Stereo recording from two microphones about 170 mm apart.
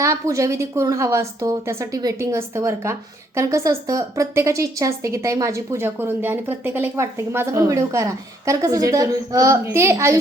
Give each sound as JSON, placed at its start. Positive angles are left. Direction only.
{"t": 0.0, "sound": "a woman's voice", "side_deg": -20}